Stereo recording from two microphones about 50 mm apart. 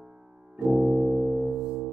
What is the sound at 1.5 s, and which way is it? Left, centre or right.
Music, centre.